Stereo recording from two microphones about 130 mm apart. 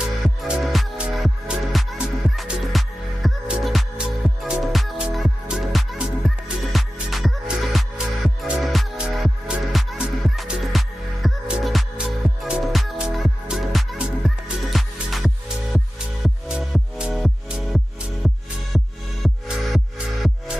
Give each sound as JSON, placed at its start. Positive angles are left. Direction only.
{"t": 0.4, "sound": "music", "side_deg": 0}